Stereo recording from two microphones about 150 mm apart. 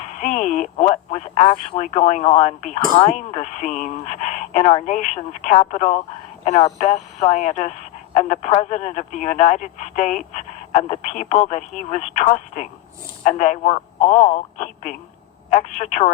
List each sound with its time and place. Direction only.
0.2 s speech: 50° left (ahead or behind)